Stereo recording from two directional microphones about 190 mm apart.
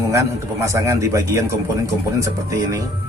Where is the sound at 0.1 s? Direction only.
15° right (ahead or behind).